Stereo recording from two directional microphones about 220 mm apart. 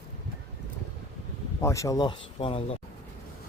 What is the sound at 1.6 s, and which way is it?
Speech, 15° left (ahead or behind).